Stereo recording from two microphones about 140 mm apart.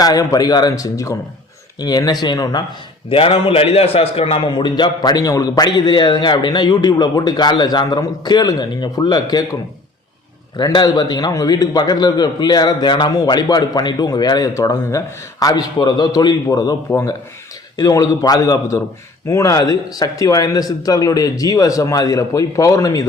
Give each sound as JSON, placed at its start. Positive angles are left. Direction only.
{"t": 0.0, "sound": "a man's voice", "side_deg": 25}
{"t": 3.1, "sound": "a man's voice", "side_deg": 40}
{"t": 10.6, "sound": "a man's voice", "side_deg": 30}